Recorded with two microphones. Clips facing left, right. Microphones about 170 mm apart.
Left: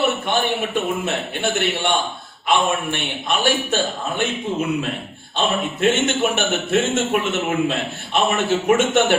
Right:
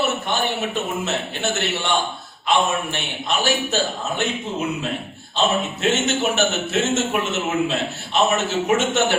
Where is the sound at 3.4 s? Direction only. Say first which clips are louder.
Left 2 dB; 50° left (ahead or behind).